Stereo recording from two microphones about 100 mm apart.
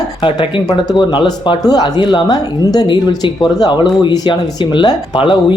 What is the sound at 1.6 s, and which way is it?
Speech, 40° left (ahead or behind).